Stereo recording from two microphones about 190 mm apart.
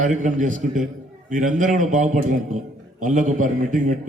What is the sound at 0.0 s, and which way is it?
A man's voice, 40° right (ahead or behind).